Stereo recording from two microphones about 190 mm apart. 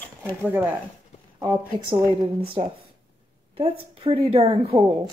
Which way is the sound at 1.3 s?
20° right (ahead or behind).